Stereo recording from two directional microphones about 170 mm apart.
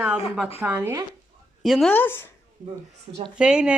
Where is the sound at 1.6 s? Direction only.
Centre (ahead or behind).